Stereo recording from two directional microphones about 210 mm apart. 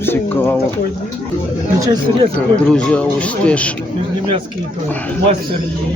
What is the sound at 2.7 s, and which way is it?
Speech, 5° left (ahead or behind).